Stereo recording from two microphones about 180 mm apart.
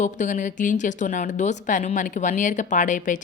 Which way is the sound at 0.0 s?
45° left (ahead or behind).